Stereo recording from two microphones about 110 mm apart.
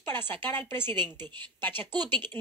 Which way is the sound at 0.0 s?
20° left (ahead or behind).